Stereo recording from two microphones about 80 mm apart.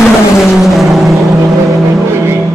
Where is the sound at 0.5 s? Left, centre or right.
Centre.